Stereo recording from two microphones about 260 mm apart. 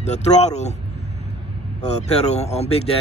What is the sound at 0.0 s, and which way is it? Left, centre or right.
Speech, left.